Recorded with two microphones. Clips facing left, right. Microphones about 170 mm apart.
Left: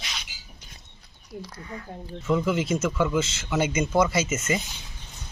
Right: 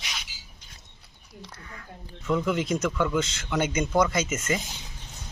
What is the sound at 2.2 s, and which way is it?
A man's voice, 5° left (ahead or behind).